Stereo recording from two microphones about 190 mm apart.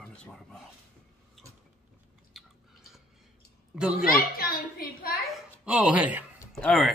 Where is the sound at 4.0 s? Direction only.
50° left (ahead or behind).